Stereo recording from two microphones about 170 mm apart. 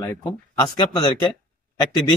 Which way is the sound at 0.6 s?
25° left (ahead or behind).